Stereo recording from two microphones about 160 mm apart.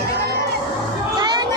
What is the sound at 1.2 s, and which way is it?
Music, 25° right (ahead or behind).